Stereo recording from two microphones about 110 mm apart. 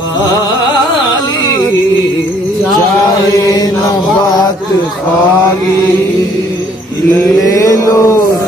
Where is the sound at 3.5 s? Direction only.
35° left (ahead or behind).